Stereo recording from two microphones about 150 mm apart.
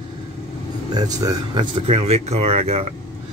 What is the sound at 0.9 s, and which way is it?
Speech, 25° right (ahead or behind).